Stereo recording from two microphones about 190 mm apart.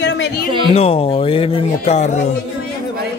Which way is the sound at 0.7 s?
30° left (ahead or behind).